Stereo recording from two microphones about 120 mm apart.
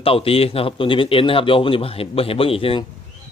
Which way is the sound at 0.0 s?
50° left (ahead or behind).